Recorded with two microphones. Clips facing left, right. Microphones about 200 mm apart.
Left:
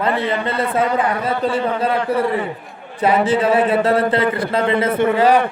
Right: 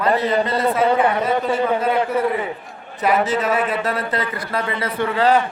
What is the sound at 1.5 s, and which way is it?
Speech, 30° left (ahead or behind).